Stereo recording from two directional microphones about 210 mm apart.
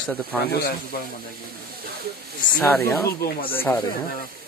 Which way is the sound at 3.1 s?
45° left (ahead or behind).